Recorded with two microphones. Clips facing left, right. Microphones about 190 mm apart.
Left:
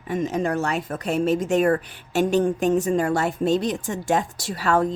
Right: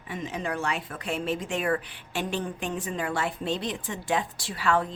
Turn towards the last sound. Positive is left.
turn(degrees=45)  # may be behind; listen again after turning